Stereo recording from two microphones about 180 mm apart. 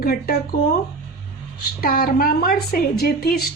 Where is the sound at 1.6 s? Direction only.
55° left (ahead or behind).